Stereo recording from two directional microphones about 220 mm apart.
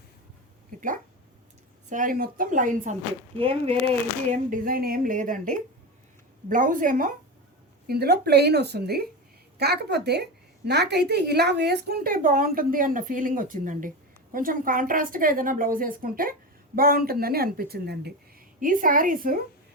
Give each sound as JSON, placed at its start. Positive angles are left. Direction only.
{"t": 0.7, "sound": "a sound", "side_deg": -40}
{"t": 1.9, "sound": "speech", "side_deg": -35}
{"t": 3.3, "sound": "speech", "side_deg": -25}